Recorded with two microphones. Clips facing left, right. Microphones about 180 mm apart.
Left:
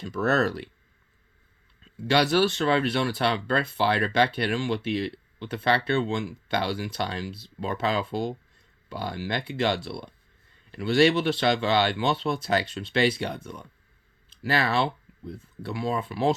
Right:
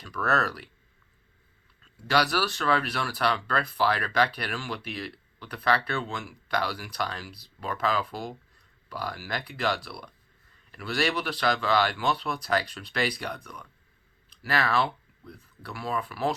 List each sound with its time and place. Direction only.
0.0 s speech: 25° left (ahead or behind)
1.8 s speech: 25° left (ahead or behind)